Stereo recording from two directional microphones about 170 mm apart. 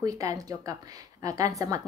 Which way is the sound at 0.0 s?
20° right (ahead or behind).